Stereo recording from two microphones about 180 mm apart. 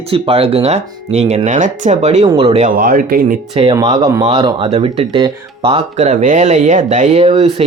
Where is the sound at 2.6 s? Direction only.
50° right (ahead or behind).